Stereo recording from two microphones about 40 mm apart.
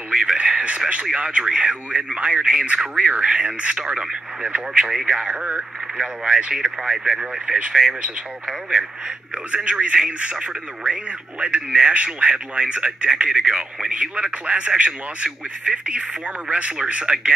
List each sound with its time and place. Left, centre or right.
0.1 s speech: right